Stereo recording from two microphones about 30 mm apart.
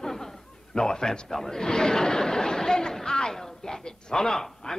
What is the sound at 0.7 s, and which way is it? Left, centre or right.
A man's voice, centre.